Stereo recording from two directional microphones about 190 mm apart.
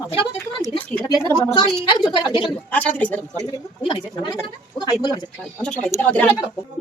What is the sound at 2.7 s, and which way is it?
Speech, 10° left (ahead or behind).